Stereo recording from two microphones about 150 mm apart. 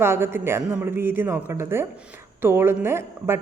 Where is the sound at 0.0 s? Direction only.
15° right (ahead or behind).